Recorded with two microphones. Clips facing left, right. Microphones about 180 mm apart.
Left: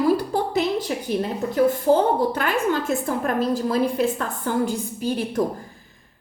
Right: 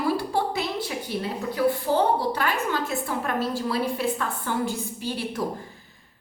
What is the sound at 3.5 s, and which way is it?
A woman's voice, 45° left (ahead or behind).